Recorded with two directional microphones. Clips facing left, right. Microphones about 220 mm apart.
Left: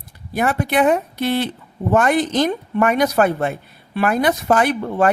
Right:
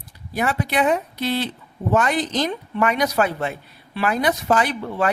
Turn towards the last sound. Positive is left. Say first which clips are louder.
# left 5 dB
turn(degrees=50)  # may be behind; listen again after turning